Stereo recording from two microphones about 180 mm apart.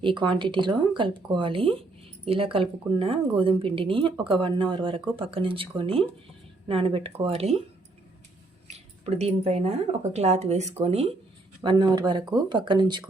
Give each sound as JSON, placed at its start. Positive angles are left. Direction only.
{"t": 0.0, "sound": "speech", "side_deg": -25}
{"t": 8.7, "sound": "speech", "side_deg": -35}
{"t": 11.6, "sound": "speech", "side_deg": -25}